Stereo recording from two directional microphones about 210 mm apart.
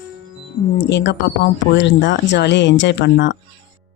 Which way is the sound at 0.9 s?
55° left (ahead or behind).